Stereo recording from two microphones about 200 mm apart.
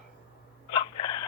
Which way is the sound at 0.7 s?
25° left (ahead or behind).